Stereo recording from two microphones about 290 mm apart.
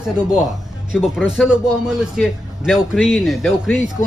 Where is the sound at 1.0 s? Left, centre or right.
Centre.